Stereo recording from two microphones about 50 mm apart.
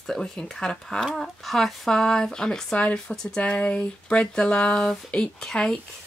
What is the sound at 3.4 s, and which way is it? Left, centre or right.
Speech, left.